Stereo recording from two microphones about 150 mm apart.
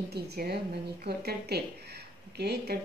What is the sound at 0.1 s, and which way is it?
Speech, 90° right.